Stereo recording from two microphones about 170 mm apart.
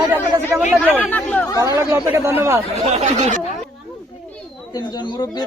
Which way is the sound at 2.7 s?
40° right (ahead or behind).